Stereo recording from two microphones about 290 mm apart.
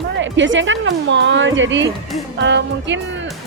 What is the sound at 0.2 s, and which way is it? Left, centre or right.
Speech, right.